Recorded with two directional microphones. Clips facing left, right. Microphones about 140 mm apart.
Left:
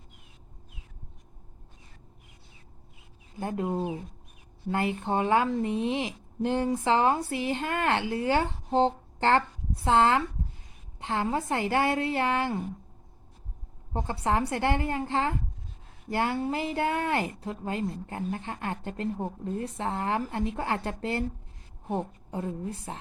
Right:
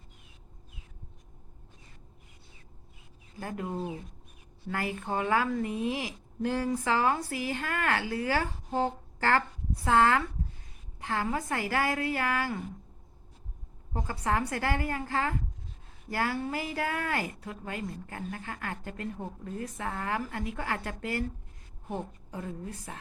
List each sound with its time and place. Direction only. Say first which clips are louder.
3.3 s speech: left 5 dB; 25° left (ahead or behind)
13.9 s speech: left 3 dB; 30° left (ahead or behind)